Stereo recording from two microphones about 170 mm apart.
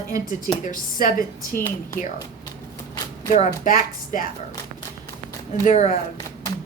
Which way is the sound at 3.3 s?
50° left (ahead or behind).